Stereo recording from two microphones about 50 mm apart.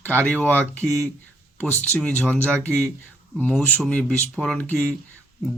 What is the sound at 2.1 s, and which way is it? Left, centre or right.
Speech, left.